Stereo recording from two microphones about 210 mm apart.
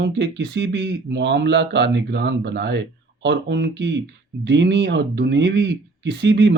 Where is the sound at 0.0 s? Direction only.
55° right (ahead or behind).